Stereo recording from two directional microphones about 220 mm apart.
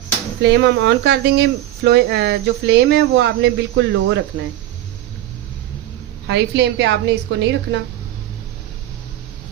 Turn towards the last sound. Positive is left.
turn(degrees=-50)  # may be behind; listen again after turning